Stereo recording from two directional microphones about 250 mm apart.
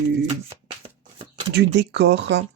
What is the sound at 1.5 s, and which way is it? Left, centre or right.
Speech, right.